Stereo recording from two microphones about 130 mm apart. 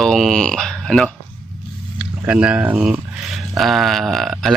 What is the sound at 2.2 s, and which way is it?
Speech, 10° right (ahead or behind).